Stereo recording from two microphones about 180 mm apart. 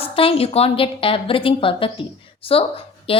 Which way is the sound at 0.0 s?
30° left (ahead or behind).